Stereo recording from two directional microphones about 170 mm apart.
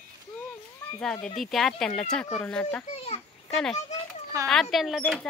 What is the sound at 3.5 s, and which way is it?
A child's voice, centre (ahead or behind).